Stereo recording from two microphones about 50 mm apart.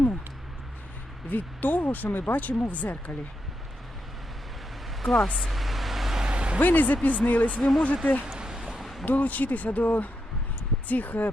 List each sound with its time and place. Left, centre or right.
1.3 s speech: left
5.0 s speech: centre
5.4 s vehicle: centre
6.3 s vehicle: right
6.6 s speech: left
7.6 s speech: centre
8.3 s a sound: centre
8.8 s a sound: centre
9.0 s speech: left